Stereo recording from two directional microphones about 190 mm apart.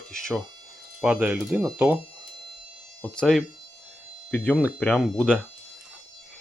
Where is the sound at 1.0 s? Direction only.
5° right (ahead or behind).